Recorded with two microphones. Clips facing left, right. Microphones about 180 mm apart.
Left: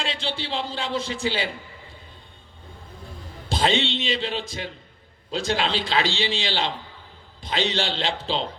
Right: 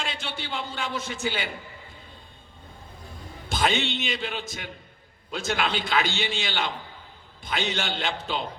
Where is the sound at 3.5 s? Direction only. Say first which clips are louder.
Left 3 dB; 30° left (ahead or behind).